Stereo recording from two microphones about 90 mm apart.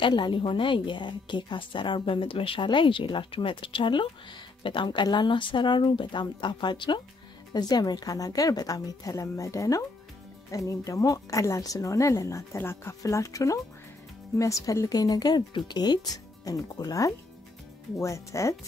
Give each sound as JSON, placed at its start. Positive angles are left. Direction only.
{"t": 0.0, "sound": "a woman's voice", "side_deg": 60}